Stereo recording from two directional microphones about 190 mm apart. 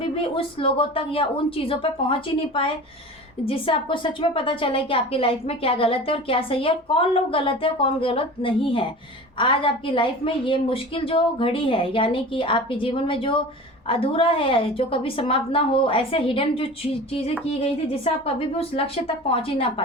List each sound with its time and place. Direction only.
0.2 s a woman's voice: 30° left (ahead or behind)
3.4 s a woman's voice: 30° left (ahead or behind)